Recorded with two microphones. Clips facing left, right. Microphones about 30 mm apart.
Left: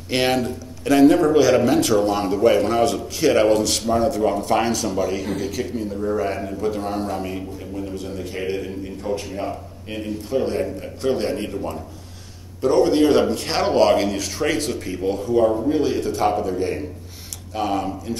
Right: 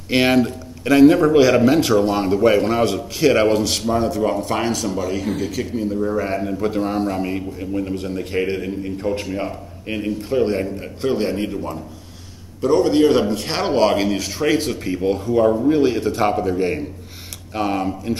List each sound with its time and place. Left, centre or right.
0.1 s a man's voice: centre; by 8.1 s right
8.5 s a man's voice: centre
9.1 s a man's voice: right
9.9 s a man's voice: centre
15.2 s a man's voice: centre
15.8 s a man's voice: right